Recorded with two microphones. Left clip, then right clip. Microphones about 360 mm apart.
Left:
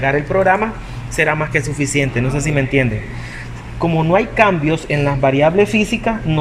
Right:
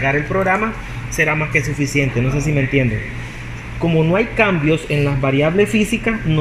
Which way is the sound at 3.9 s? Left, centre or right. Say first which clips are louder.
Left 1 dB; left.